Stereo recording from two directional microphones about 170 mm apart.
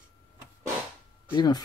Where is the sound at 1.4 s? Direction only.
25° left (ahead or behind).